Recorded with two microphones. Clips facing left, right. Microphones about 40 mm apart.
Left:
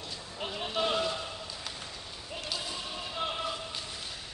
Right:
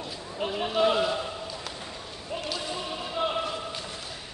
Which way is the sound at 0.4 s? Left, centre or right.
Centre.